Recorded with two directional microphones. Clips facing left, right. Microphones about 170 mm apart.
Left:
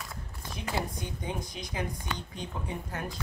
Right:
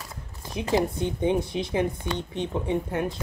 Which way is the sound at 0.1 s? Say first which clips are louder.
Right 6 dB; 25° right (ahead or behind).